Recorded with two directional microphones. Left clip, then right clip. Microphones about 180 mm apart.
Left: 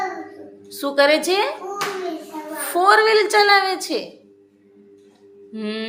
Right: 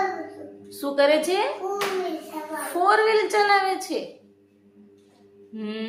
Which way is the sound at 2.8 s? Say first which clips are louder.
Left 5 dB; 25° left (ahead or behind).